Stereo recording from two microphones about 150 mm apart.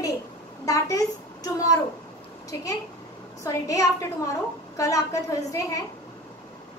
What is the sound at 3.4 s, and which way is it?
A woman's voice, 20° left (ahead or behind).